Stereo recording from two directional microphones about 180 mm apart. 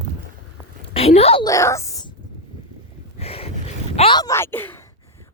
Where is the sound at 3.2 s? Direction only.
35° left (ahead or behind); by 4.9 s 10° left (ahead or behind).